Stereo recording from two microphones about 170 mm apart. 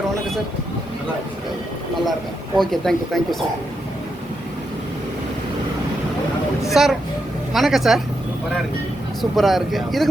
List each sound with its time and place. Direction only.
2.6 s speech: centre (ahead or behind)
6.8 s speech: 5° right (ahead or behind)
9.3 s speech: centre (ahead or behind)